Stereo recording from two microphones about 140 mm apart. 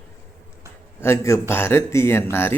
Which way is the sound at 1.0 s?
20° left (ahead or behind).